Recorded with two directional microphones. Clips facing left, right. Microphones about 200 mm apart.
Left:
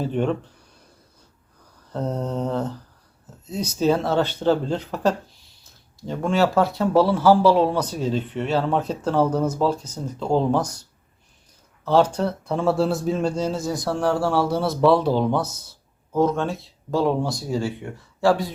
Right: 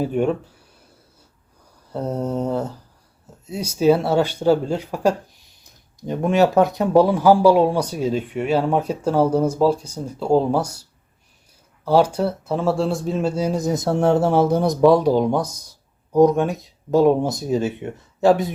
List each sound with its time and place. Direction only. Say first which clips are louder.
0.0 s speech: right 3 dB; 10° right (ahead or behind)
1.9 s speech: right 2 dB; 10° right (ahead or behind)
11.9 s speech: right 2 dB; 10° right (ahead or behind)